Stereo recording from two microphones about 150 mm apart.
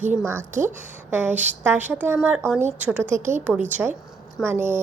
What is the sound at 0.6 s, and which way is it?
Speech, 60° right (ahead or behind).